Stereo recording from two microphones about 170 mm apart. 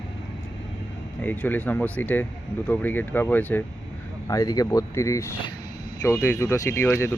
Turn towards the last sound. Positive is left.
turn(degrees=15)  # may be behind; listen again after turning